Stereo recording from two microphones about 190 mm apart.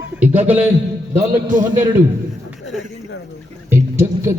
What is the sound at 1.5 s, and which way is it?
Speech, 45° right (ahead or behind).